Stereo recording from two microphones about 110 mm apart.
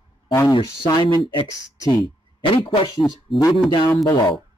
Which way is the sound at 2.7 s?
40° left (ahead or behind).